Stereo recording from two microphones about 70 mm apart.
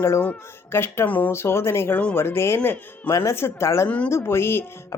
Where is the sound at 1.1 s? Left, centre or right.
Left.